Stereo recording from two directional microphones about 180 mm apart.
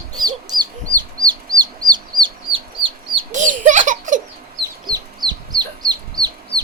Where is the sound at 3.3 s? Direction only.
45° right (ahead or behind).